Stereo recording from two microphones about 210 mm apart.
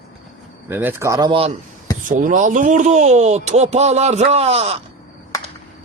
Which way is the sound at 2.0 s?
40° right (ahead or behind).